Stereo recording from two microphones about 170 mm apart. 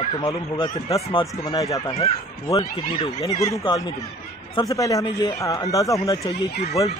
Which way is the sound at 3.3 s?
20° left (ahead or behind).